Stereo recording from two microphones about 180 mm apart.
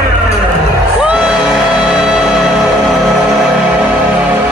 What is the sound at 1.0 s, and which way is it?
Music, 5° right (ahead or behind).